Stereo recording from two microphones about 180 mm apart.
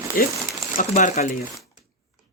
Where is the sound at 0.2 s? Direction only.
50° left (ahead or behind).